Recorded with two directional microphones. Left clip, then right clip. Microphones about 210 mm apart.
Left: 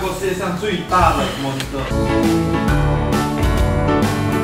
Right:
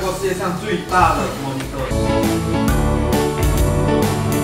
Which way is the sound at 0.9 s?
Centre (ahead or behind).